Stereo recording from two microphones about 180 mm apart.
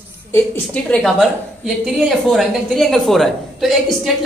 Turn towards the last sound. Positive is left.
turn(degrees=0)  # may be behind; listen again after turning